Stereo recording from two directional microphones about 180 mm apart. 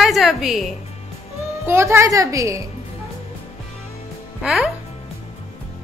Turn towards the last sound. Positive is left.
turn(degrees=0)  # may be behind; listen again after turning